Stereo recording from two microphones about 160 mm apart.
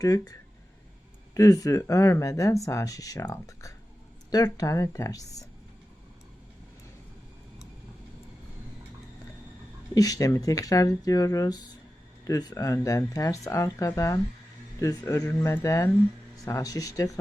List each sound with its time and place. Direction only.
0.0 s speech: 20° left (ahead or behind)
9.9 s speech: 20° left (ahead or behind)